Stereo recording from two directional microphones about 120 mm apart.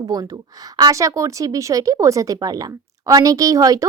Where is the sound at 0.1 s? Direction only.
30° right (ahead or behind).